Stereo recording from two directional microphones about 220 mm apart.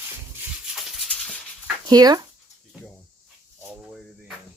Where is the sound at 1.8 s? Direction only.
20° right (ahead or behind).